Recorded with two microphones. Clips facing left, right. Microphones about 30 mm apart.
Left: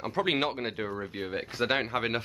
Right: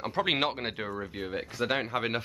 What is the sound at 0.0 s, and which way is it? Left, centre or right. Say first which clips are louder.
Speech: even; centre.